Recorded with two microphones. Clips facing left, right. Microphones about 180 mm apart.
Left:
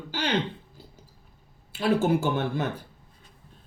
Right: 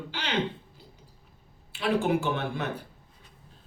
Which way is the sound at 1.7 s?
45° left (ahead or behind).